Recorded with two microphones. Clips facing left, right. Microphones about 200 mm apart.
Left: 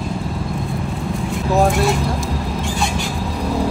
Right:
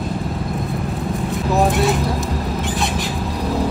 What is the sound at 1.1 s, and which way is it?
Vehicle, centre (ahead or behind).